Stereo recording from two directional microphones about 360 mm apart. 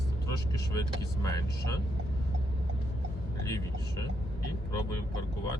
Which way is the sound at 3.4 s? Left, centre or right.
Centre.